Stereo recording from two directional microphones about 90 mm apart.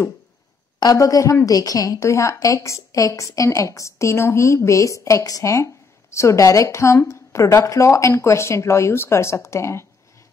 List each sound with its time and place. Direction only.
0.9 s a woman's voice: 40° left (ahead or behind)